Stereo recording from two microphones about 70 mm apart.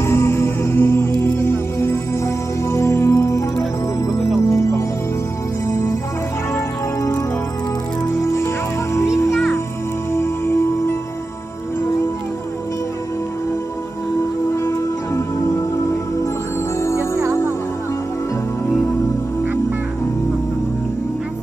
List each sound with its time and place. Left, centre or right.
0.0 s music: left
7.0 s music: left
14.5 s music: left
15.4 s music: left